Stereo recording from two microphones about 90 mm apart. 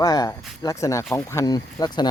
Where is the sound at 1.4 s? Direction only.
45° left (ahead or behind).